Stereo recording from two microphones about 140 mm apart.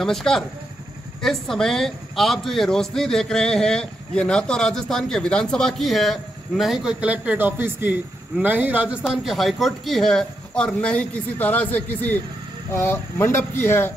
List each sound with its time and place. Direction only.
0.0 s speech: 5° left (ahead or behind)